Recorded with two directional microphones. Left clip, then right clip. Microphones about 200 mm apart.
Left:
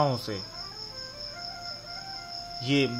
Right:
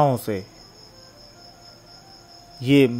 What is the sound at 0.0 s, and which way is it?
Speech, 35° right (ahead or behind).